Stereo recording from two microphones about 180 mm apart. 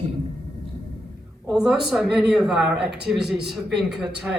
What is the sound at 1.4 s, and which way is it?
Speech, 5° right (ahead or behind).